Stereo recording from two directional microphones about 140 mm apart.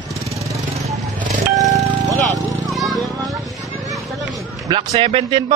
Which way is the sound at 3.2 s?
Centre (ahead or behind).